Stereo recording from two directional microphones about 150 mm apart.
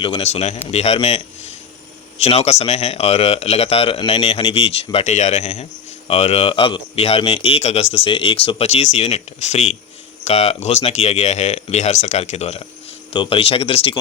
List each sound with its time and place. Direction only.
0.0 s a man's voice: 40° left (ahead or behind)